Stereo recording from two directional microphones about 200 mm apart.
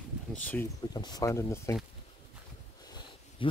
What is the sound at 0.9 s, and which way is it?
Speech, 20° left (ahead or behind).